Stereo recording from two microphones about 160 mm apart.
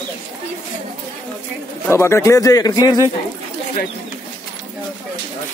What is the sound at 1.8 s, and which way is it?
A man's voice, 15° left (ahead or behind).